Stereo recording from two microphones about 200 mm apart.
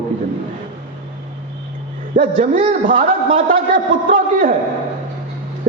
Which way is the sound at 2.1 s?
40° right (ahead or behind).